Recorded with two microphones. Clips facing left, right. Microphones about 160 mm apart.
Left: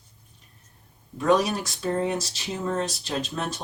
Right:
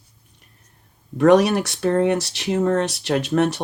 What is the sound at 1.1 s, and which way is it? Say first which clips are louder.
Speech: right 8 dB; 70° right (ahead or behind).